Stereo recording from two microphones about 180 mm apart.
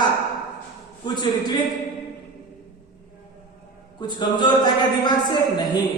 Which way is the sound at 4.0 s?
25° left (ahead or behind).